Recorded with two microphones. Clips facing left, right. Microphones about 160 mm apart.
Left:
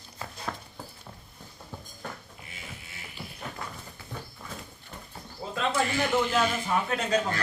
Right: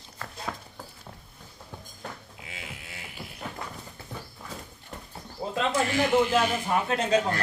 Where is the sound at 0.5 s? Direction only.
Centre (ahead or behind).